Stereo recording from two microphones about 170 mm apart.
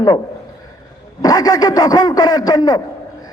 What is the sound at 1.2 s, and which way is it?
A man's voice, 20° left (ahead or behind).